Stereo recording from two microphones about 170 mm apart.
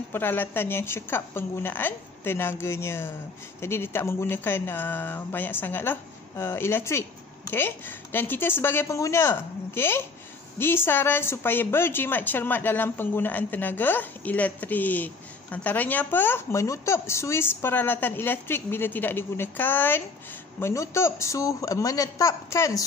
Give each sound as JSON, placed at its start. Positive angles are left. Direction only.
{"t": 0.1, "sound": "speech", "side_deg": 10}